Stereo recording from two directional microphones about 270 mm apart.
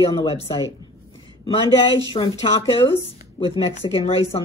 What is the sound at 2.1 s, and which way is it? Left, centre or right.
Speech, centre.